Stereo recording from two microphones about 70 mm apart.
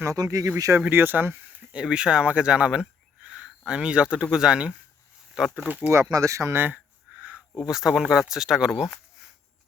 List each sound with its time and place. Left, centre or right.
0.2 s speech: right
0.9 s speech: right
1.7 s speech: centre
3.2 s a sound: centre
3.7 s speech: centre
5.5 s speech: right
6.1 s speech: right
6.7 s a sound: centre
7.6 s speech: centre